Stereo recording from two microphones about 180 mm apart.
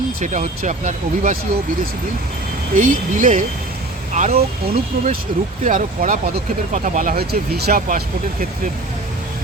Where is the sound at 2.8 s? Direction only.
45° right (ahead or behind).